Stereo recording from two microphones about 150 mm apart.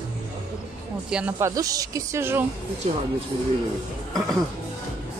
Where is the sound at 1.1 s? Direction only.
10° right (ahead or behind).